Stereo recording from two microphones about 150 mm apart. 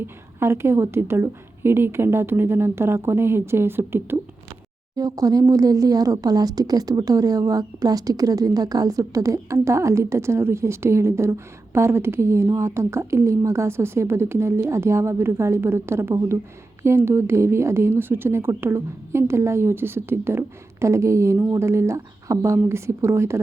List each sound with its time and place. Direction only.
0.0 s speech: 15° right (ahead or behind)